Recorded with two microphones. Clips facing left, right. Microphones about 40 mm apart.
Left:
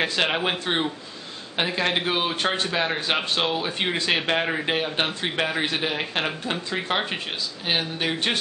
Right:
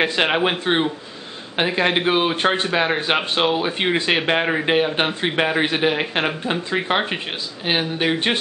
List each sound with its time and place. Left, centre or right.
0.0 s a man's voice: centre